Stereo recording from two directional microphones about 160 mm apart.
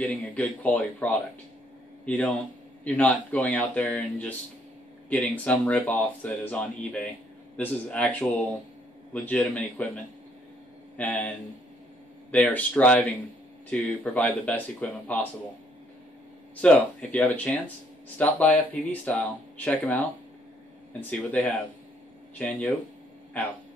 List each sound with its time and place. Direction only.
0.0 s a man's voice: 10° left (ahead or behind)
11.0 s speech: 10° left (ahead or behind)
16.6 s speech: 10° left (ahead or behind)
21.1 s speech: 10° left (ahead or behind)